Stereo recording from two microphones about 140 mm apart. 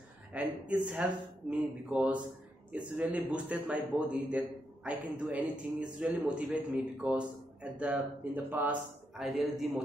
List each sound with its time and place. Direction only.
0.3 s a man's voice: 10° right (ahead or behind)